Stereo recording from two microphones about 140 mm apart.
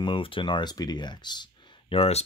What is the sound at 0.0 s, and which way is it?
Speech, 40° left (ahead or behind).